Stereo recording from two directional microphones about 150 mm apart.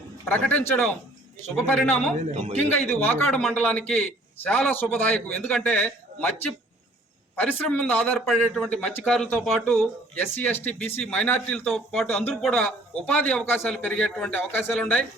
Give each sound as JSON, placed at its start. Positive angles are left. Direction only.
{"t": 0.3, "sound": "a man's voice", "side_deg": 10}
{"t": 2.3, "sound": "speech", "side_deg": -50}
{"t": 3.2, "sound": "a man's voice", "side_deg": 5}
{"t": 7.3, "sound": "a man's voice", "side_deg": 10}